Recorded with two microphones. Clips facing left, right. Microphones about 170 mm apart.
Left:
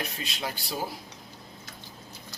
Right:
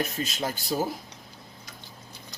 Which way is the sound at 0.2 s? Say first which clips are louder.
Right 5 dB; 45° right (ahead or behind).